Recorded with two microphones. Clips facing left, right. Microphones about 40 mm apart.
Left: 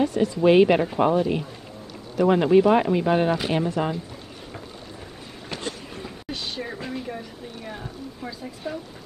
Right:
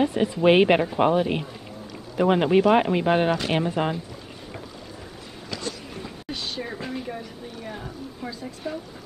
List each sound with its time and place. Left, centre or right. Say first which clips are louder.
0.0 s speech: even; right
6.0 s a sound: even; centre
8.2 s speech: right 1 dB; centre